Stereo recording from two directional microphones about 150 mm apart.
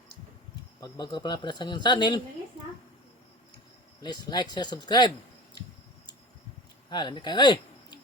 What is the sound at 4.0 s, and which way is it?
Speech, 30° left (ahead or behind).